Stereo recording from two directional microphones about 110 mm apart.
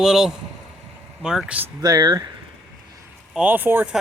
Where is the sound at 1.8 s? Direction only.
35° right (ahead or behind).